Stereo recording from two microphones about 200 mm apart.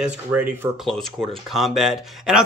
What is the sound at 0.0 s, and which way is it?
Speech, 10° right (ahead or behind).